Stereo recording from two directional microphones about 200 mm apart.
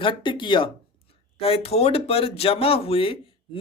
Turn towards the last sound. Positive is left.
turn(degrees=25)  # may be behind; listen again after turning